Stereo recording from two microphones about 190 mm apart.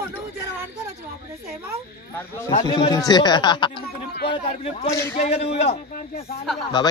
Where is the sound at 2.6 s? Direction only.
20° left (ahead or behind).